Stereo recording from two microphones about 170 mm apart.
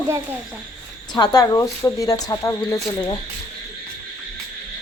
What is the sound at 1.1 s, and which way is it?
Speech, 20° left (ahead or behind).